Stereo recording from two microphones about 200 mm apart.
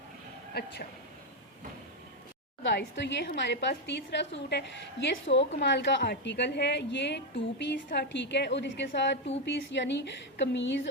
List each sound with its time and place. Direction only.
0.5 s speech: 55° left (ahead or behind)
2.6 s a woman's voice: 60° left (ahead or behind)